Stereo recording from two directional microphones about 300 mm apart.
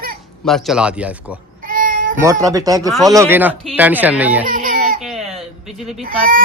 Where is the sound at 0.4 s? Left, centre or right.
Centre.